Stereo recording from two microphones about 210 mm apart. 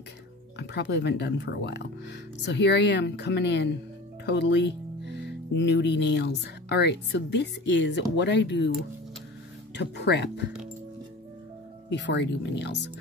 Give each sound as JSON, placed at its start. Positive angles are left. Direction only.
{"t": 0.6, "sound": "speech", "side_deg": 55}
{"t": 9.8, "sound": "speech", "side_deg": 55}
{"t": 11.9, "sound": "speech", "side_deg": 55}